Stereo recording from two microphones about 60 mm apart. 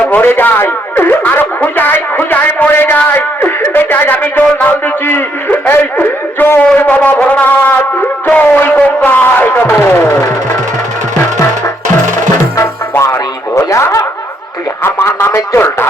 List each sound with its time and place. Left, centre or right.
0.0 s a man's voice: left
3.1 s a sound: left
6.7 s brass instrument: left
8.3 s music: left
13.6 s snicker: left
14.8 s a sound: left